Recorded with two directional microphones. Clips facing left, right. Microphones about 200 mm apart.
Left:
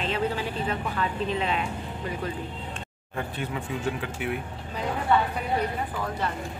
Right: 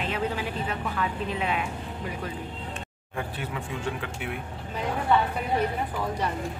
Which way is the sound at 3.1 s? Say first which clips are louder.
Left 1 dB; 5° right (ahead or behind).